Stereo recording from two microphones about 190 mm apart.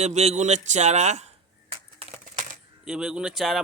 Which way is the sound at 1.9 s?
40° right (ahead or behind).